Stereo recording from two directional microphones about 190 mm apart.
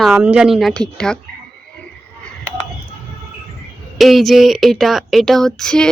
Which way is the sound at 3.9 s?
Centre (ahead or behind).